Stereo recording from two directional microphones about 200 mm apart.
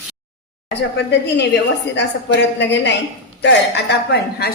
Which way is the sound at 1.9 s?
60° left (ahead or behind).